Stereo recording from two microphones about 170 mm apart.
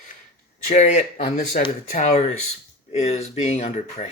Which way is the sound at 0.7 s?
40° left (ahead or behind).